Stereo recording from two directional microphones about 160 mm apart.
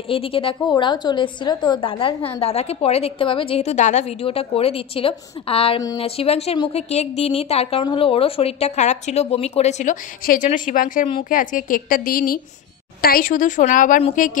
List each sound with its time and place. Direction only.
0.1 s a woman's voice: 35° left (ahead or behind); by 14.4 s 55° left (ahead or behind)